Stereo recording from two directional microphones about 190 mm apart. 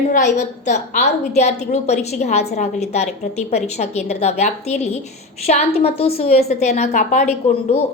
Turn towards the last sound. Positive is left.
turn(degrees=35)  # may be behind; listen again after turning